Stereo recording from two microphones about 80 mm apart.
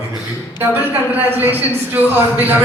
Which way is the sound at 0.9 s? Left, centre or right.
Right.